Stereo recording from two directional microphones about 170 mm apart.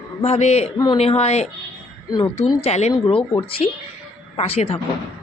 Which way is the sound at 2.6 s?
40° left (ahead or behind).